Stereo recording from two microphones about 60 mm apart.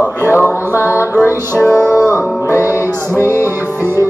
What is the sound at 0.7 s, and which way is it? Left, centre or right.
Music, left.